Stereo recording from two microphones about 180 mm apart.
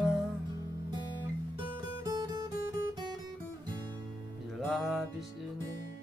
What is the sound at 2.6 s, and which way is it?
Guitar, 20° right (ahead or behind).